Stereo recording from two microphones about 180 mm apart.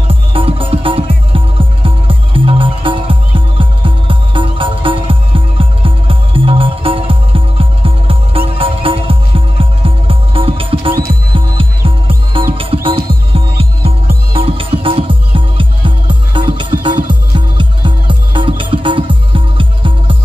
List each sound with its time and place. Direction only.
0.1 s music: 30° right (ahead or behind)
12.5 s music: 30° right (ahead or behind)